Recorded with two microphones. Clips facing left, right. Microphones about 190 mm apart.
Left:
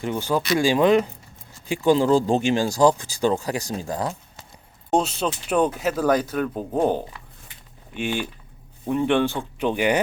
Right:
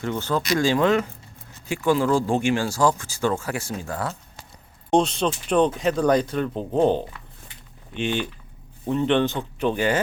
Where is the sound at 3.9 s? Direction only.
15° left (ahead or behind).